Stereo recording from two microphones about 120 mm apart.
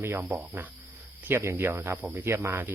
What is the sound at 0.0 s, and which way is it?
Speech, 20° right (ahead or behind).